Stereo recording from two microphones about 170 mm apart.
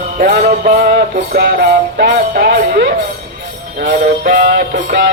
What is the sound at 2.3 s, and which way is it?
Speech, 60° right (ahead or behind).